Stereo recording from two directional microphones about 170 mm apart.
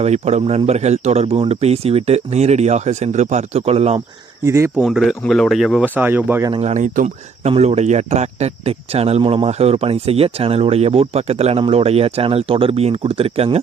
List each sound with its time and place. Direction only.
0.0 s speech: 40° right (ahead or behind)
4.4 s speech: 15° right (ahead or behind)
4.8 s speech: centre (ahead or behind)
6.5 s speech: 40° right (ahead or behind)